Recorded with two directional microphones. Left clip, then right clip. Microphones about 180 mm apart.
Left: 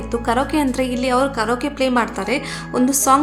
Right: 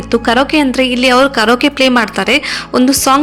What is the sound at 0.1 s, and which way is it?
A woman's voice, 25° right (ahead or behind).